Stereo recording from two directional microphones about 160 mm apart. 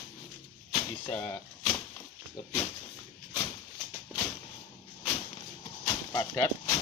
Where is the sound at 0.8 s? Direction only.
30° left (ahead or behind).